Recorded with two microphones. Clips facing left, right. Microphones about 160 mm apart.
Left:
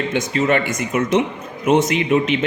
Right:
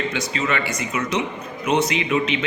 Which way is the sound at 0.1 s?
50° left (ahead or behind).